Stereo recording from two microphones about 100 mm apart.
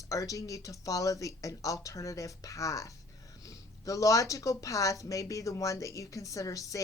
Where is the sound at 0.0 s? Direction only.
35° left (ahead or behind).